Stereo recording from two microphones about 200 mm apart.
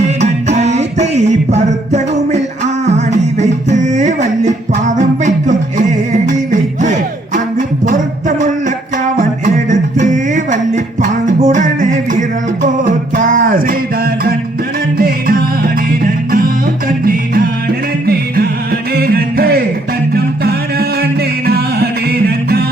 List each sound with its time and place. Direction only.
0.2 s music: 35° right (ahead or behind)
9.6 s music: 40° right (ahead or behind)
14.9 s music: 45° right (ahead or behind)
17.0 s music: 45° right (ahead or behind)
18.9 s music: 50° right (ahead or behind)